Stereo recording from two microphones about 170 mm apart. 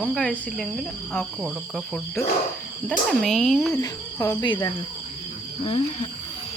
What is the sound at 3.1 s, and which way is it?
Cricket, centre (ahead or behind).